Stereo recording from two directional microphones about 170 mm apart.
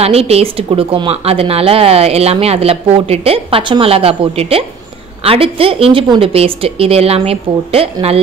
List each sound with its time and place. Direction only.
0.0 s speech: 35° right (ahead or behind)